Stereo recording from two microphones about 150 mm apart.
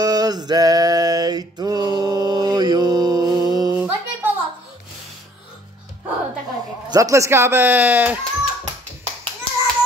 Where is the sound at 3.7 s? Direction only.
10° right (ahead or behind).